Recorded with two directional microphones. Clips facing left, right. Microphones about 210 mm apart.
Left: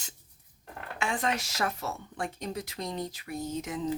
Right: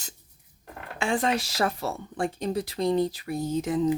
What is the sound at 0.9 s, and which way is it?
Speech, 30° right (ahead or behind).